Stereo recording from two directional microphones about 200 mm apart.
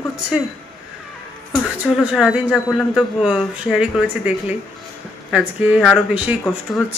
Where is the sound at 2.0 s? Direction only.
5° right (ahead or behind).